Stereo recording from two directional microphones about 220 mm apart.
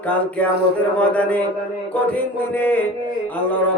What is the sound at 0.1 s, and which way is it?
Music, 5° left (ahead or behind).